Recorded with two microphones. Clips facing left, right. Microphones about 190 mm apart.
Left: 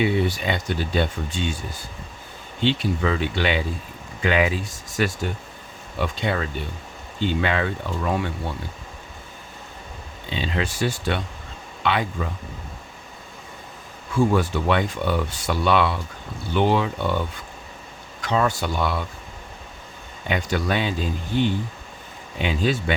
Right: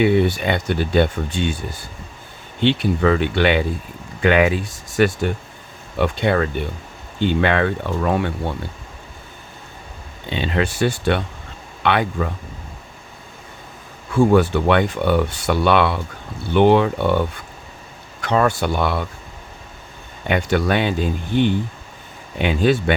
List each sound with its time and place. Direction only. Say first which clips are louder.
0.0 s speech: right 6 dB; 60° right (ahead or behind)
2.6 s speech: right 5 dB; 65° right (ahead or behind)
10.2 s speech: right 5 dB; 60° right (ahead or behind)
14.1 s speech: right 6 dB; 65° right (ahead or behind)
20.2 s speech: right 5 dB; 60° right (ahead or behind)